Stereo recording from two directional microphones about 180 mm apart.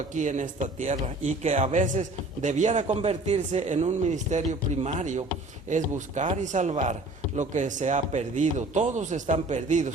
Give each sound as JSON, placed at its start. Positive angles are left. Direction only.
{"t": 0.1, "sound": "a man's voice", "side_deg": -45}